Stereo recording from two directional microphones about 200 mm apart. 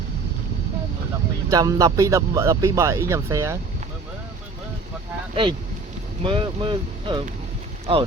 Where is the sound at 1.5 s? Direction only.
20° right (ahead or behind).